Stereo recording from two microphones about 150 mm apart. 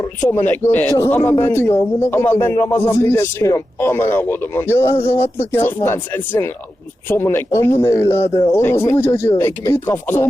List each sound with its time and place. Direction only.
0.2 s a man's voice: 15° left (ahead or behind)